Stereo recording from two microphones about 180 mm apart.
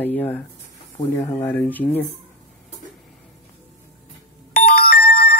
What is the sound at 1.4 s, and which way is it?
Speech, 10° left (ahead or behind).